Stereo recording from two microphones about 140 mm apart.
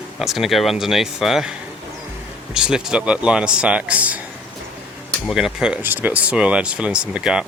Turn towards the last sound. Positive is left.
turn(degrees=-5)  # may be behind; listen again after turning